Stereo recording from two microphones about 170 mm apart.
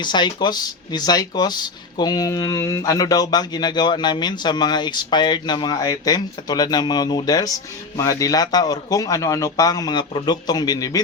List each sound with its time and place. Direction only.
0.0 s speech: 25° left (ahead or behind)